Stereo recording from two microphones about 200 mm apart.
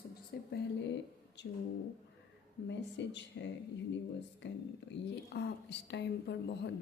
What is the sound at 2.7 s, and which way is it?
A woman's voice, 65° left (ahead or behind).